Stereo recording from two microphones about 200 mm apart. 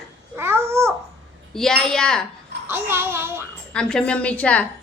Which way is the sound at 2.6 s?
10° right (ahead or behind).